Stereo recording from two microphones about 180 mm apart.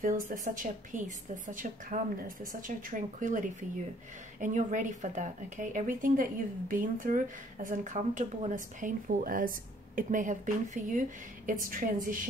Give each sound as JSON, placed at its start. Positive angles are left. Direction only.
{"t": 0.0, "sound": "speech", "side_deg": -50}